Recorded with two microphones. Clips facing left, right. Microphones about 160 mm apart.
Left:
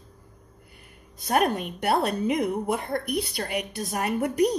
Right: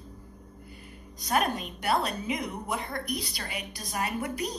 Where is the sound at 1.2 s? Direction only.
55° left (ahead or behind).